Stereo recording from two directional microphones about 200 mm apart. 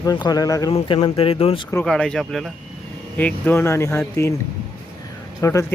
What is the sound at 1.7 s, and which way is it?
Speech, 5° left (ahead or behind).